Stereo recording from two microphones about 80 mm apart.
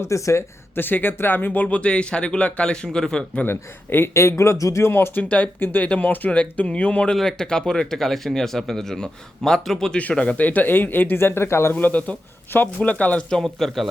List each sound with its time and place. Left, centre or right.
0.0 s a man's voice: left
0.8 s speech: left
1.6 s a man's voice: centre
3.4 s a man's voice: left
11.8 s a man's voice: centre